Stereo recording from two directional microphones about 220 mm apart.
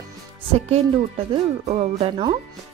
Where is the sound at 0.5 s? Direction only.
30° right (ahead or behind).